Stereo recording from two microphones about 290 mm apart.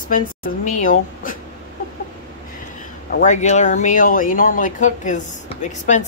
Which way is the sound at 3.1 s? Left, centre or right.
Left.